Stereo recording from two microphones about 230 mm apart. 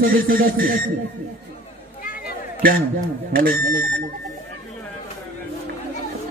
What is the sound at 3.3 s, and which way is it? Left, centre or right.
Speech, right.